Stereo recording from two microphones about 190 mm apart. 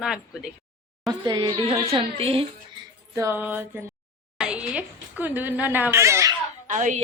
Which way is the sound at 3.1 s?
15° right (ahead or behind).